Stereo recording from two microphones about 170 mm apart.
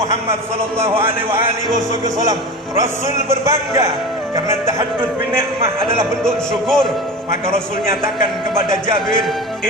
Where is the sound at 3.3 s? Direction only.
15° right (ahead or behind).